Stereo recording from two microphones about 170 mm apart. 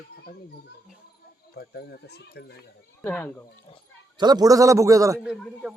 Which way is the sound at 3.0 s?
10° left (ahead or behind).